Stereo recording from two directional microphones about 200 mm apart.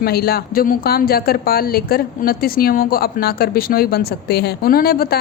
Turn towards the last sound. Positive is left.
turn(degrees=50)  # may be behind; listen again after turning